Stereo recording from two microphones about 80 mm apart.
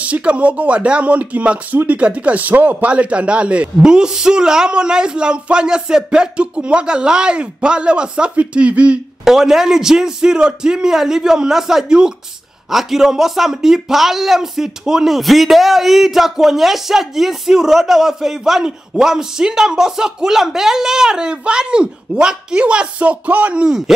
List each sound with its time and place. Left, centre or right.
0.0 s speech: centre